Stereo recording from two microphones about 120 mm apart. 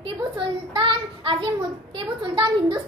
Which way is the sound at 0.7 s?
45° right (ahead or behind).